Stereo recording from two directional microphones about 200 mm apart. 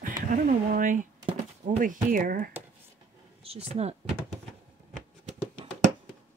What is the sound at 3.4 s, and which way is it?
Speech, 30° right (ahead or behind).